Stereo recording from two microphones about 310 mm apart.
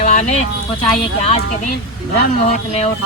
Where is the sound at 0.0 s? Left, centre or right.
Left.